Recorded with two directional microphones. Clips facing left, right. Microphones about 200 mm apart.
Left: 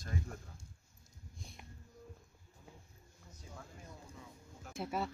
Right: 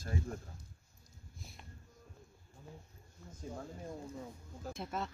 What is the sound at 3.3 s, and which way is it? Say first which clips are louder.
Speech: right 9 dB; 50° right (ahead or behind).